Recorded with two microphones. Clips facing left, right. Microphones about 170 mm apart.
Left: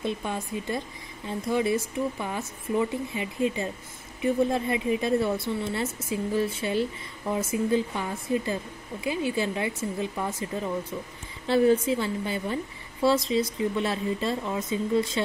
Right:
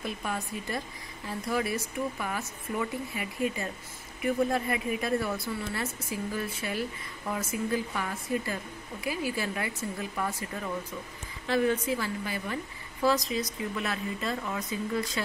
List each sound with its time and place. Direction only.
0.0 s a woman's voice: 25° left (ahead or behind)